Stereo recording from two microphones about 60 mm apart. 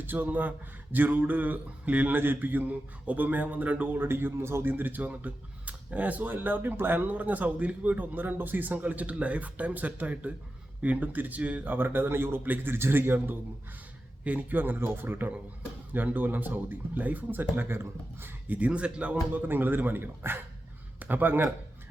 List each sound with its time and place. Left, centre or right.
0.0 s a man's voice: right
4.0 s a man's voice: right; by 19.2 s centre
19.3 s a man's voice: right